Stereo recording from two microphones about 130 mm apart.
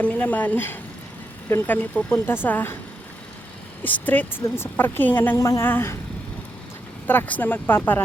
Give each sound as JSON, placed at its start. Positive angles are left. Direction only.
{"t": 0.0, "sound": "a woman's voice", "side_deg": 10}
{"t": 3.8, "sound": "a woman's voice", "side_deg": 15}
{"t": 7.1, "sound": "a woman's voice", "side_deg": 15}